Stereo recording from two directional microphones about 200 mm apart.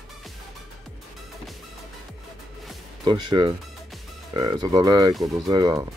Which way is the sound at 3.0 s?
25° right (ahead or behind).